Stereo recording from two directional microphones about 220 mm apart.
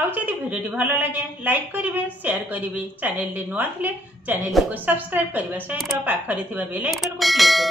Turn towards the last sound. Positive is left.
turn(degrees=0)  # may be behind; listen again after turning